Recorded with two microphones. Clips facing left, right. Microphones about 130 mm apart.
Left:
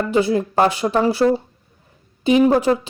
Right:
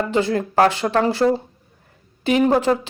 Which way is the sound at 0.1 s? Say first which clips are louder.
Left 2 dB; 15° left (ahead or behind).